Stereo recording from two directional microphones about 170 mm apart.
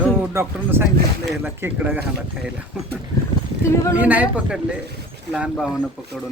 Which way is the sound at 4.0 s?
10° right (ahead or behind).